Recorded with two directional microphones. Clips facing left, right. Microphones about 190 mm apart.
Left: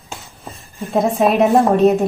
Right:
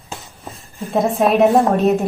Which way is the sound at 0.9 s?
Centre (ahead or behind).